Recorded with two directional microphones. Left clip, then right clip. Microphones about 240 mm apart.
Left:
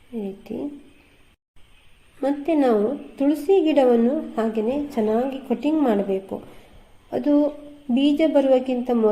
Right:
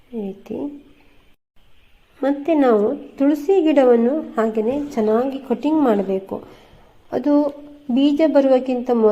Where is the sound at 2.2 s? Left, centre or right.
Right.